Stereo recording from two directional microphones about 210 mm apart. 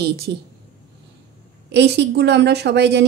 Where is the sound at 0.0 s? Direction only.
50° right (ahead or behind).